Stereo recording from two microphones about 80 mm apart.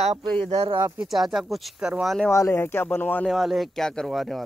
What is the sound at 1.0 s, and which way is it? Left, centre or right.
Speech, centre.